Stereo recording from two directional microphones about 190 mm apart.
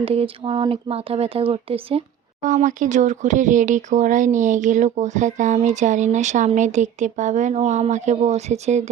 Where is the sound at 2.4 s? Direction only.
40° right (ahead or behind).